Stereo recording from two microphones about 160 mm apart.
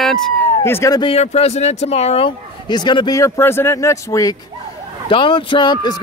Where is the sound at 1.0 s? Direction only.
35° left (ahead or behind); by 4.3 s 20° left (ahead or behind).